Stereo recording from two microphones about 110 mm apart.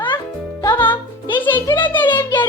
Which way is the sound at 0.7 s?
20° left (ahead or behind).